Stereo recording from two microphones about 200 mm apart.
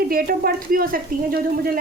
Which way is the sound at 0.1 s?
50° right (ahead or behind).